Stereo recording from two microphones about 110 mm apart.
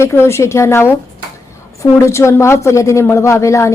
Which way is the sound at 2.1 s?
25° left (ahead or behind).